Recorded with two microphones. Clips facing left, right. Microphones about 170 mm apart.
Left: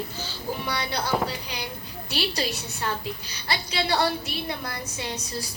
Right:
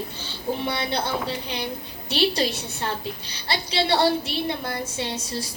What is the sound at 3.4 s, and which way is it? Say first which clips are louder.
A woman's voice: right 3 dB; 30° right (ahead or behind).